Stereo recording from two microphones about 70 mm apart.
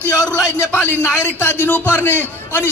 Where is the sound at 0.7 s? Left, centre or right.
Left.